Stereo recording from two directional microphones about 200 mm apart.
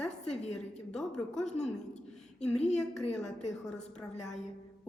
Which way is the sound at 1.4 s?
35° left (ahead or behind).